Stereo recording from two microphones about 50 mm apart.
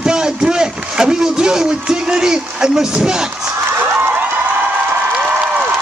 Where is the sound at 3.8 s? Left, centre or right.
Right.